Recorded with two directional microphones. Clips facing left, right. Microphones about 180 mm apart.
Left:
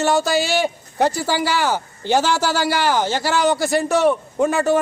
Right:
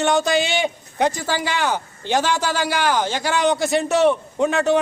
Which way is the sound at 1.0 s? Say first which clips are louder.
Left 2 dB; 10° left (ahead or behind).